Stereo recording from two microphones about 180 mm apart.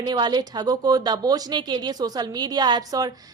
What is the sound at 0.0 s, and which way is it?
A woman's voice, 25° right (ahead or behind).